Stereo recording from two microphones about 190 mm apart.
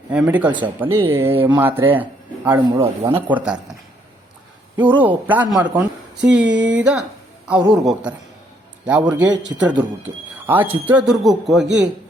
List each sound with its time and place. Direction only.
0.1 s speech: 10° right (ahead or behind)
2.6 s speech: 25° right (ahead or behind)
3.2 s speech: 10° right (ahead or behind)
4.9 s speech: 10° right (ahead or behind)
6.3 s speech: 5° right (ahead or behind)
7.6 s speech: 20° right (ahead or behind)
8.8 s speech: 5° right (ahead or behind)
9.3 s speech: 20° right (ahead or behind)
10.3 s speech: 10° right (ahead or behind)
11.6 s speech: 70° right (ahead or behind)